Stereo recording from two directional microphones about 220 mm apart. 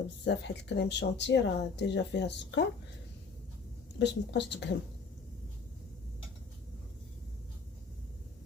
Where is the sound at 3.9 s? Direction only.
55° left (ahead or behind).